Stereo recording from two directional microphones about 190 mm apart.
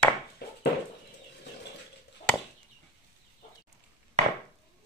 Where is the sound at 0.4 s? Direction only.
55° left (ahead or behind).